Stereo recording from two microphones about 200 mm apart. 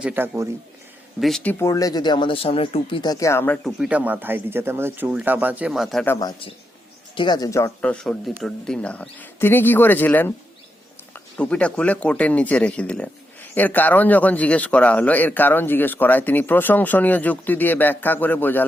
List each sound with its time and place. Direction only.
0.0 s speech: 10° right (ahead or behind)
1.2 s speech: 5° left (ahead or behind)
3.8 s speech: 5° right (ahead or behind)
6.1 s speech: 20° left (ahead or behind)